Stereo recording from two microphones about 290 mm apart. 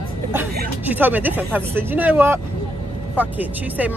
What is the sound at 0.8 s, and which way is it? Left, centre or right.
Speech, centre.